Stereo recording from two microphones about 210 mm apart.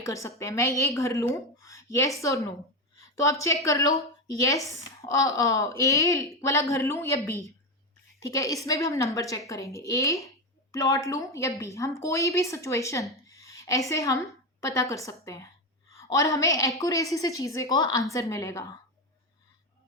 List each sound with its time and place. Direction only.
0.0 s a woman's voice: 15° left (ahead or behind)
8.2 s a woman's voice: 15° left (ahead or behind)